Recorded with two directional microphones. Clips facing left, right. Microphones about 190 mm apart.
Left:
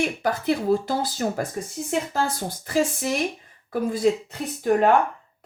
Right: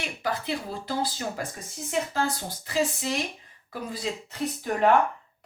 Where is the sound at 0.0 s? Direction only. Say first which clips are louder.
Left 7 dB; 45° left (ahead or behind).